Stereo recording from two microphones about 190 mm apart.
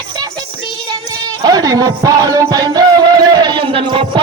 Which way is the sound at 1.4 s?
20° right (ahead or behind).